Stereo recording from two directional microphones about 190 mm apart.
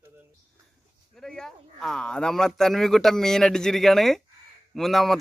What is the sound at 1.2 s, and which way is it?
A man's voice, 5° left (ahead or behind).